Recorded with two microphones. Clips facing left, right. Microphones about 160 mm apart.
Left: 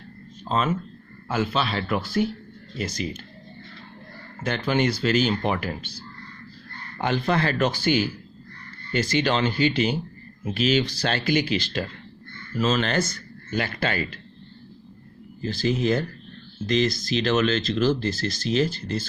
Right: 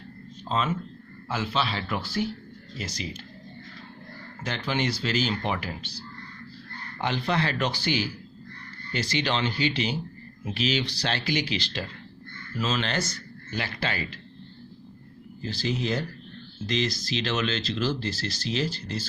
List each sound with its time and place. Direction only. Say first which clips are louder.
0.4 s speech: left 3 dB; 45° left (ahead or behind)
4.4 s speech: left 5 dB; 55° left (ahead or behind)
7.0 s speech: left 4 dB; 50° left (ahead or behind)
15.4 s speech: left 5 dB; 50° left (ahead or behind)